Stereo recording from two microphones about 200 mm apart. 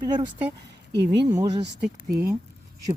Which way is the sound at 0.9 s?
60° right (ahead or behind).